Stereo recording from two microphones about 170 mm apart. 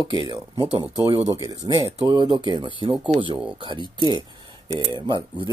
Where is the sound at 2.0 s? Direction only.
30° right (ahead or behind).